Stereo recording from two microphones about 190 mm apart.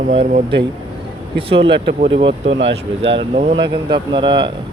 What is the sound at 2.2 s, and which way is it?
Speech, 75° right (ahead or behind).